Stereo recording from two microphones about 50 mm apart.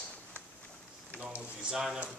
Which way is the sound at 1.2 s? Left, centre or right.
Right.